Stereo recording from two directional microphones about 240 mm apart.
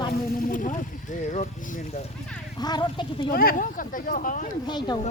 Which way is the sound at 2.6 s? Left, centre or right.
Centre.